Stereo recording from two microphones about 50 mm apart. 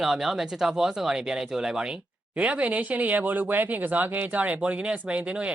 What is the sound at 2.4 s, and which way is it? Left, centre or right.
Speech, right.